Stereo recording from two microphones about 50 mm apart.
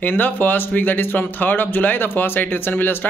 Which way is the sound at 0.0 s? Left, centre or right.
Left.